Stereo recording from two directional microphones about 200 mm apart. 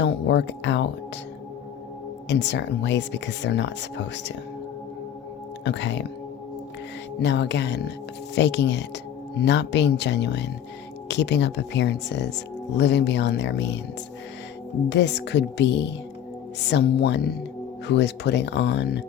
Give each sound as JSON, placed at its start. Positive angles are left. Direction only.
{"t": 0.0, "sound": "speech", "side_deg": 60}
{"t": 2.2, "sound": "speech", "side_deg": 60}
{"t": 5.6, "sound": "speech", "side_deg": 65}
{"t": 7.2, "sound": "speech", "side_deg": 60}
{"t": 14.8, "sound": "speech", "side_deg": 60}